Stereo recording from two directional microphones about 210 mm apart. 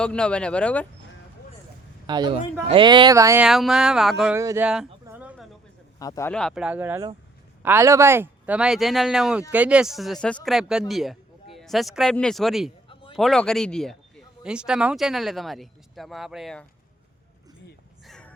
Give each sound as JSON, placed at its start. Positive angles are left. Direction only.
{"t": 0.0, "sound": "speech", "side_deg": 5}
{"t": 2.0, "sound": "speech", "side_deg": -20}
{"t": 3.4, "sound": "speech", "side_deg": 0}
{"t": 4.4, "sound": "speech", "side_deg": -15}
{"t": 5.0, "sound": "a sound", "side_deg": -5}
{"t": 6.0, "sound": "speech", "side_deg": 15}
{"t": 12.9, "sound": "a sound", "side_deg": 25}
{"t": 13.1, "sound": "speech", "side_deg": 0}
{"t": 18.0, "sound": "a sound", "side_deg": 5}